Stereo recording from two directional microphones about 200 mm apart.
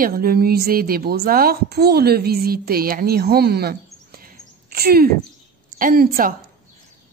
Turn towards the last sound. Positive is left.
turn(degrees=-45)  # may be behind; listen again after turning